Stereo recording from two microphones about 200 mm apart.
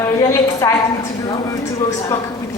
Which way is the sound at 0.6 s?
15° left (ahead or behind).